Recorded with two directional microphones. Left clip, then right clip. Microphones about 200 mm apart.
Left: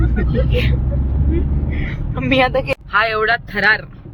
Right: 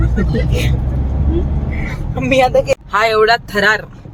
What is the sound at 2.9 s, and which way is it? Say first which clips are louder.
Speech: right 3 dB; 25° right (ahead or behind).